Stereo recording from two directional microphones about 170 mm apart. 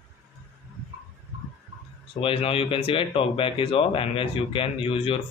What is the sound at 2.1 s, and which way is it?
Speech, 35° left (ahead or behind).